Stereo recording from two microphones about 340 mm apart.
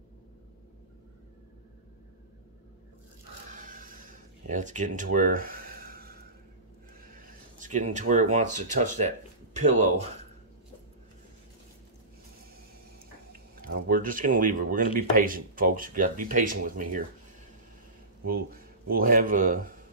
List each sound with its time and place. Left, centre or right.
3.5 s a sound: right
7.2 s speech: right
13.3 s speech: right
18.2 s speech: right